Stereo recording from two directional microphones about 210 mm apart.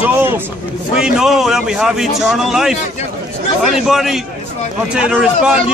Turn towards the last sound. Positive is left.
turn(degrees=-5)  # may be behind; listen again after turning